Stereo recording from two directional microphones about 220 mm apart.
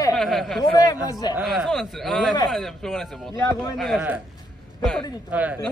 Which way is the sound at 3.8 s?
Centre (ahead or behind).